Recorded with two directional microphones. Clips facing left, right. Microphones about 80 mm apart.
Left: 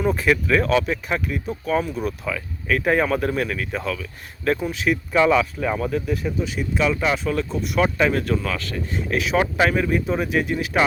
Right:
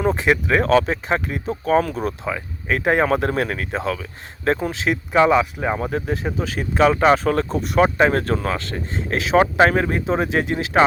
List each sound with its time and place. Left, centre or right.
0.0 s speech: right